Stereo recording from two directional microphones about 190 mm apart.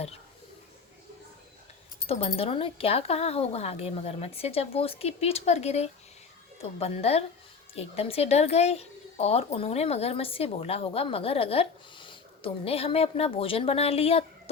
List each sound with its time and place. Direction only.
2.0 s speech: 30° left (ahead or behind)